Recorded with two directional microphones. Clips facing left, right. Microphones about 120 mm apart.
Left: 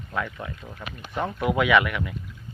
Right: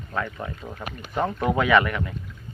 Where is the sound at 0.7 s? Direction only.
45° right (ahead or behind).